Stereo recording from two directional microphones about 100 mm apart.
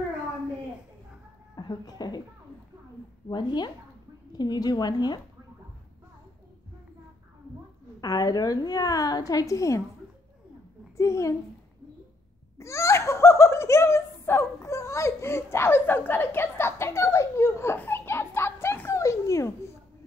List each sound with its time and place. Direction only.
1.5 s speech: 45° left (ahead or behind)
3.3 s a woman's voice: 45° left (ahead or behind)
8.0 s a woman's voice: 40° left (ahead or behind)
11.0 s a woman's voice: 30° left (ahead or behind)
12.5 s giggle: 30° left (ahead or behind)